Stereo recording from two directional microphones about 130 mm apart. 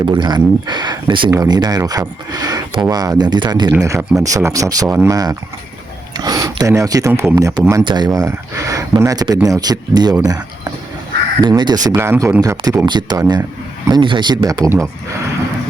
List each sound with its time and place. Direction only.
0.0 s speech: 35° right (ahead or behind)
3.8 s speech: 25° right (ahead or behind)
7.1 s speech: 15° right (ahead or behind)
7.3 s speech: 25° right (ahead or behind)
7.9 s speech: 35° right (ahead or behind)
10.2 s a sound: 30° right (ahead or behind)
11.4 s speech: 35° right (ahead or behind)
11.9 s speech: 20° right (ahead or behind); by 14.5 s 35° right (ahead or behind)
14.5 s speech: 25° right (ahead or behind)